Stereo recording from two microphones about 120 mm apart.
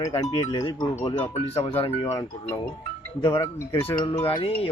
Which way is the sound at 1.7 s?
50° left (ahead or behind).